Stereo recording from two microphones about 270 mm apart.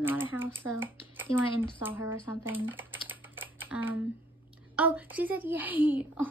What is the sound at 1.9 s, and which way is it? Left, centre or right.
Speech, left.